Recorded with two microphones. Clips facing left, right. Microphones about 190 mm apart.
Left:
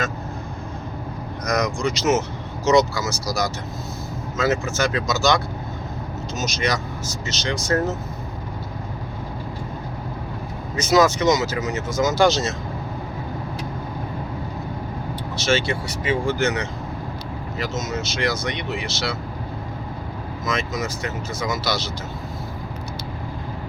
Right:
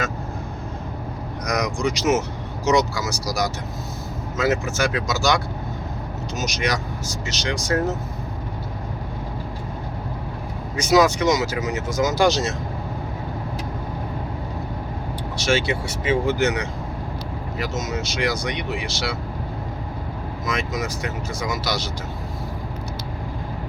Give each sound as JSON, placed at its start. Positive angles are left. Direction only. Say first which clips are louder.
{"t": 1.5, "sound": "speech", "louder": "left 1 dB", "side_deg": -15}
{"t": 10.8, "sound": "speech", "louder": "even", "side_deg": -15}
{"t": 15.4, "sound": "speech", "louder": "even", "side_deg": -15}
{"t": 20.4, "sound": "speech", "louder": "left 1 dB", "side_deg": -15}